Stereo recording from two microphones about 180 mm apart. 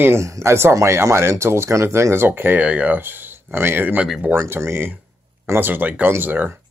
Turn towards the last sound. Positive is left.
turn(degrees=-10)  # may be behind; listen again after turning